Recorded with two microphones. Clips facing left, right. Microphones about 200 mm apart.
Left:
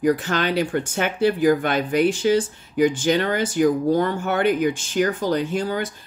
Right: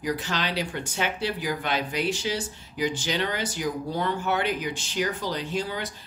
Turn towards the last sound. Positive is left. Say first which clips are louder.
# left 6 dB
turn(degrees=50)  # may be behind; listen again after turning